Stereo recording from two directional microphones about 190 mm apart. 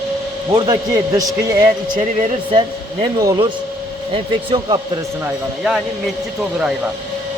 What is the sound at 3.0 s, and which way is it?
A man's voice, 20° right (ahead or behind).